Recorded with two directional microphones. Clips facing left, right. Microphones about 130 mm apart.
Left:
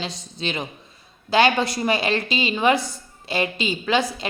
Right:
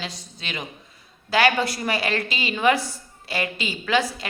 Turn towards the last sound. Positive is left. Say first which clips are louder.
# left 1 dB
turn(degrees=20)  # may be behind; listen again after turning